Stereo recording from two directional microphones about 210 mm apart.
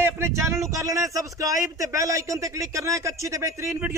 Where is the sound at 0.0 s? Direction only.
15° right (ahead or behind).